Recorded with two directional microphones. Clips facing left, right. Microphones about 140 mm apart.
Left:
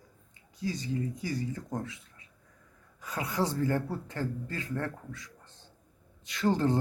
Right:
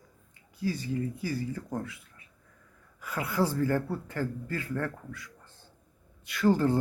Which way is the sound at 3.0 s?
20° left (ahead or behind).